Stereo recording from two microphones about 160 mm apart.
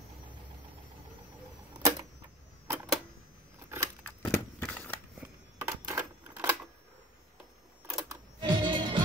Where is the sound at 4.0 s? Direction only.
10° left (ahead or behind).